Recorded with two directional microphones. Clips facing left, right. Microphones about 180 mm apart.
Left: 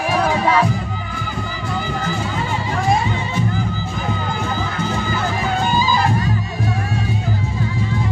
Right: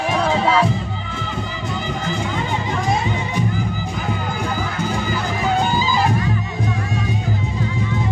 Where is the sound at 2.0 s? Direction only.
20° right (ahead or behind).